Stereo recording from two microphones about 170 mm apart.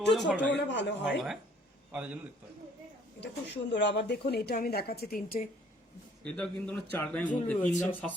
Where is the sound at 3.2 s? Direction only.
90° left; by 5.4 s 60° left (ahead or behind).